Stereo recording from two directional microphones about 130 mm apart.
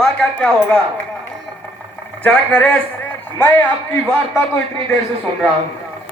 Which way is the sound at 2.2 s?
10° left (ahead or behind).